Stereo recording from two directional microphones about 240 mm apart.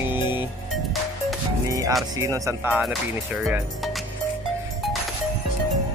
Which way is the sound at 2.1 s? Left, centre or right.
Centre.